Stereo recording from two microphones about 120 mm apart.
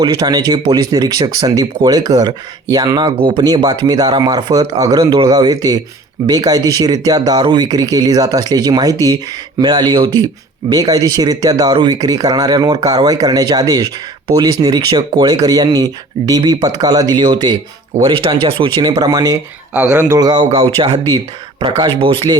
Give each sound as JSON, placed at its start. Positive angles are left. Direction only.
{"t": 0.0, "sound": "speech", "side_deg": -35}
{"t": 18.8, "sound": "speech", "side_deg": -35}
{"t": 19.7, "sound": "speech", "side_deg": -10}
{"t": 20.1, "sound": "speech", "side_deg": -30}
{"t": 20.4, "sound": "speech", "side_deg": -65}
{"t": 20.7, "sound": "speech", "side_deg": -55}